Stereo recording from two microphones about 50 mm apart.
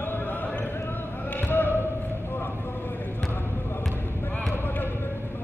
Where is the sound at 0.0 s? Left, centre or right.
Left.